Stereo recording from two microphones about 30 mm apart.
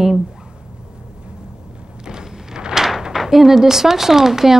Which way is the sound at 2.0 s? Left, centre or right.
Right.